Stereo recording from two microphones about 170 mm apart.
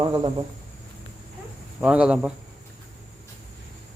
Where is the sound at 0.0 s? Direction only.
30° right (ahead or behind).